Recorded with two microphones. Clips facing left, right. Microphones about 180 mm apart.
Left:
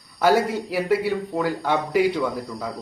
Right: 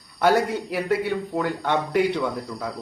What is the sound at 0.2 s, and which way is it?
Speech, 5° left (ahead or behind).